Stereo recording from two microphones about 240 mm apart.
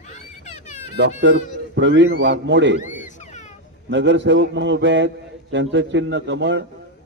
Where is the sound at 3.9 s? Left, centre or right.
Right.